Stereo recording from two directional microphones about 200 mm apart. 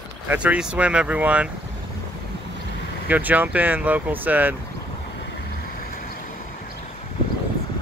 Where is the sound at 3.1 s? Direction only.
10° right (ahead or behind).